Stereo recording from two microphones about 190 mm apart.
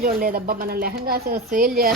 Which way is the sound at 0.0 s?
50° right (ahead or behind).